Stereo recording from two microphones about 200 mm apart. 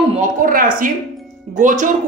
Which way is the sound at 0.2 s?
45° right (ahead or behind).